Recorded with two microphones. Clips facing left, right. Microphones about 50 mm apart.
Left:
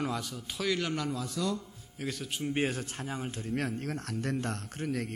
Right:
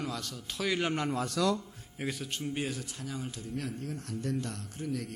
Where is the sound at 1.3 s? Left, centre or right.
Right.